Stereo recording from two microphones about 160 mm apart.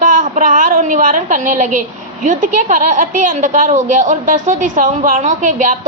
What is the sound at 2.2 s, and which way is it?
A woman's voice, 55° right (ahead or behind).